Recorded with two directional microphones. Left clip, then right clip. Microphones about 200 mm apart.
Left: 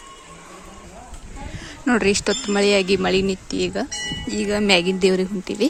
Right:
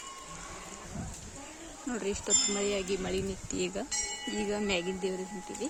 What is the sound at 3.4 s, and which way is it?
Speech, 5° left (ahead or behind).